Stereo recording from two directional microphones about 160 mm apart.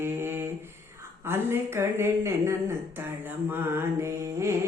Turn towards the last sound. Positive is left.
turn(degrees=-15)  # may be behind; listen again after turning